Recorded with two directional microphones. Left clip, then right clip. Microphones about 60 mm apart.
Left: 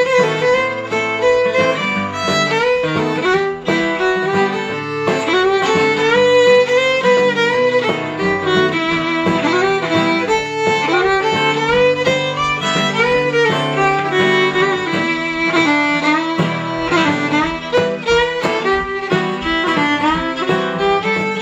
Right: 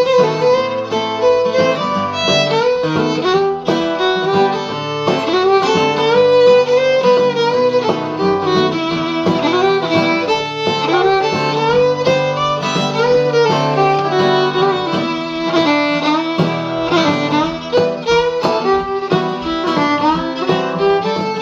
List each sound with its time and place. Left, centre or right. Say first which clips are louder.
0.0 s music: right 2 dB; left
2.2 s violin: right 2 dB; centre
4.0 s music: right 2 dB; centre
9.5 s music: right 3 dB; left
10.9 s violin: right 5 dB; left
13.8 s music: right 1 dB; left